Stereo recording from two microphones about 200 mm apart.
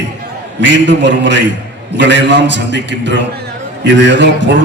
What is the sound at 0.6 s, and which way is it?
A man's voice, 65° right (ahead or behind).